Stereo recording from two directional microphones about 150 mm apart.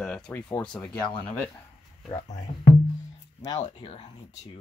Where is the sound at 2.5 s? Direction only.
45° left (ahead or behind).